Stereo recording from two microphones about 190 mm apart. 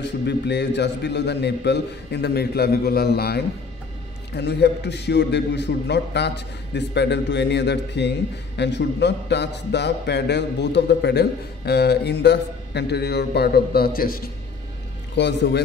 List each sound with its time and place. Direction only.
0.0 s a man's voice: 65° left (ahead or behind)
15.1 s a man's voice: 65° left (ahead or behind)